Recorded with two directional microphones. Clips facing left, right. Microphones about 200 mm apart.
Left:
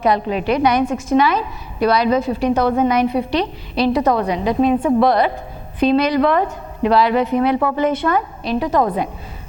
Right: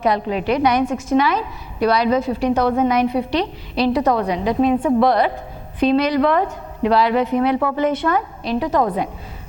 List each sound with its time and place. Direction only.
0.0 s a woman's voice: 15° left (ahead or behind)
5.0 s a woman's voice: 10° left (ahead or behind)